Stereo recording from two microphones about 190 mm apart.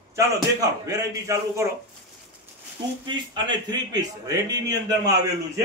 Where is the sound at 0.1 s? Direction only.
15° right (ahead or behind).